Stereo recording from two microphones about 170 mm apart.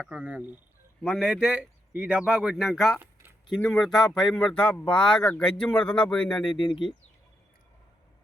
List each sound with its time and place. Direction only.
0.0 s speech: 5° right (ahead or behind)
6.6 s speech: 30° left (ahead or behind)